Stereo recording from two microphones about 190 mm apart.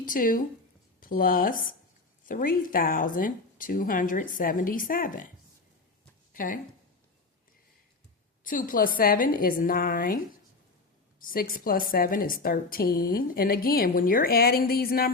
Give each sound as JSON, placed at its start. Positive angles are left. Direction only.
{"t": 0.0, "sound": "a woman's voice", "side_deg": 45}
{"t": 6.3, "sound": "speech", "side_deg": 45}
{"t": 8.4, "sound": "a woman's voice", "side_deg": 45}
{"t": 11.2, "sound": "a woman's voice", "side_deg": 50}